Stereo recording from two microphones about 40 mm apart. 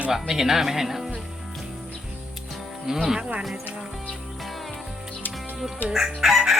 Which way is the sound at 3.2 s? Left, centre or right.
Right.